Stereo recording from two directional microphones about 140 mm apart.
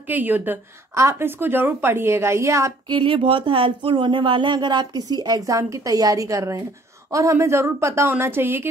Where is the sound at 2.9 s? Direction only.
40° right (ahead or behind).